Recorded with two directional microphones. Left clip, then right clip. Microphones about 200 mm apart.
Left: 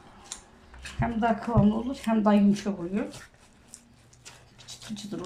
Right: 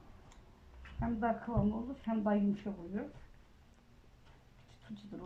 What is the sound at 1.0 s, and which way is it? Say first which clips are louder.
Speech: left 9 dB; 20° left (ahead or behind).